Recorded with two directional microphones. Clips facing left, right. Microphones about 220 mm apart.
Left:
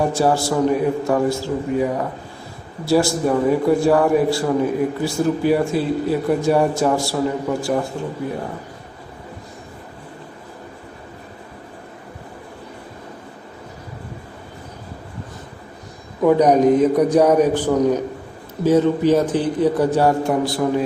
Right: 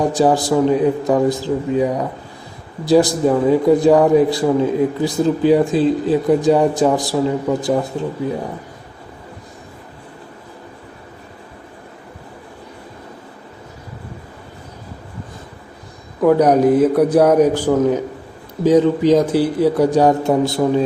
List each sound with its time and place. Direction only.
0.1 s a man's voice: 15° right (ahead or behind)
16.2 s a man's voice: 10° right (ahead or behind)